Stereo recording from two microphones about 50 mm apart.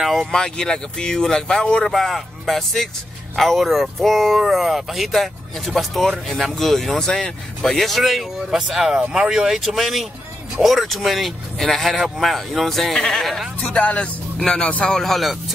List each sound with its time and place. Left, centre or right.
0.0 s speech: centre
0.3 s speech: centre
1.9 s speech: centre
9.6 s speech: centre
13.6 s speech: left
14.9 s speech: centre